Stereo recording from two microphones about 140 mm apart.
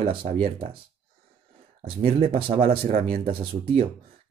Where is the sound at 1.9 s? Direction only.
45° right (ahead or behind).